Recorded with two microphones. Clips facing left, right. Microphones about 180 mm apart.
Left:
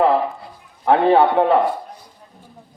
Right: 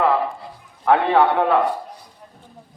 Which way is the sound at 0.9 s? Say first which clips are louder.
Left 2 dB; 25° left (ahead or behind).